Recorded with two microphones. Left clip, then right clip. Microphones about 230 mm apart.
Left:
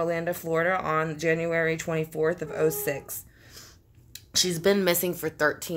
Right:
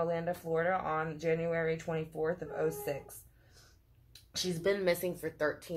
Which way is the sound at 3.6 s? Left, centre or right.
Left.